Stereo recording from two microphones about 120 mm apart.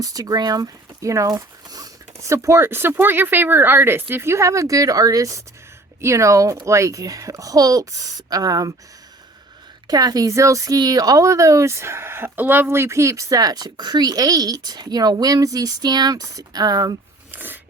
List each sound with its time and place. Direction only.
0.0 s speech: 30° right (ahead or behind)
9.8 s speech: 30° right (ahead or behind)
17.3 s a sound: 15° right (ahead or behind)